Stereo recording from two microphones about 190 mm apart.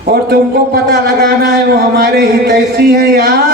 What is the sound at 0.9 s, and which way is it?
A man's voice, 60° right (ahead or behind).